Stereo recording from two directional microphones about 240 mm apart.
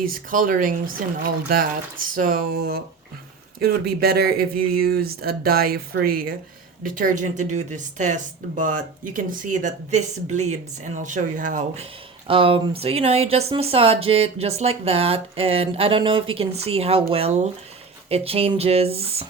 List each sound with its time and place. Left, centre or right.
0.0 s speech: right
12.3 s speech: right